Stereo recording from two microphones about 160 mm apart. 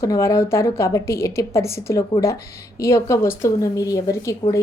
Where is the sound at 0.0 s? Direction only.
20° left (ahead or behind).